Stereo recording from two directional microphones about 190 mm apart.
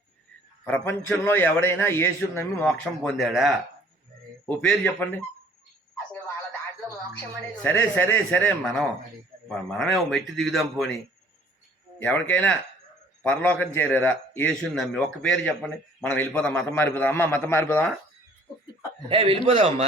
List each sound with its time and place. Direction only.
0.6 s a man's voice: 10° left (ahead or behind)
7.6 s a man's voice: 10° left (ahead or behind)
12.0 s a man's voice: 5° left (ahead or behind)
19.0 s a man's voice: 30° right (ahead or behind)